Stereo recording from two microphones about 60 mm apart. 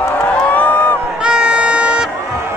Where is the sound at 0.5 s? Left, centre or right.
Left.